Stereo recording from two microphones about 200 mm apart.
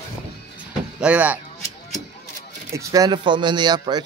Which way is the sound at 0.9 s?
5° right (ahead or behind).